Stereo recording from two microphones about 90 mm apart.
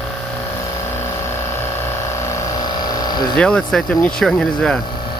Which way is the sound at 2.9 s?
50° left (ahead or behind).